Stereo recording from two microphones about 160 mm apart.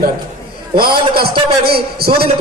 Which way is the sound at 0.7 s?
70° right (ahead or behind).